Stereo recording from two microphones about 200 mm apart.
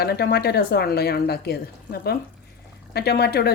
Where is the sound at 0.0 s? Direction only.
50° left (ahead or behind).